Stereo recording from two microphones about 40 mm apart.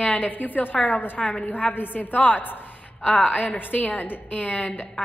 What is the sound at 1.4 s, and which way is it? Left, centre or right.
A woman's voice, left.